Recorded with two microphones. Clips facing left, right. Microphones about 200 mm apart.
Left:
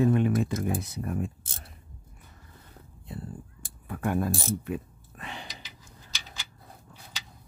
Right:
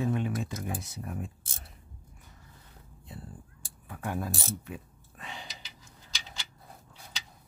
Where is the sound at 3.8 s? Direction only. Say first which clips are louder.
Left 7 dB; 60° left (ahead or behind).